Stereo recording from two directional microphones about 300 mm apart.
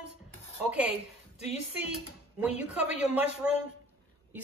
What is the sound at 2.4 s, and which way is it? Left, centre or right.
Speech, centre.